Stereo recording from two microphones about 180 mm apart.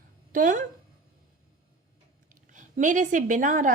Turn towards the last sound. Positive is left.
turn(degrees=-45)  # may be behind; listen again after turning